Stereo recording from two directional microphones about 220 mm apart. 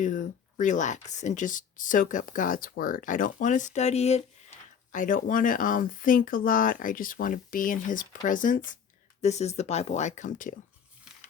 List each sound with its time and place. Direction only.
0.0 s speech: 35° left (ahead or behind)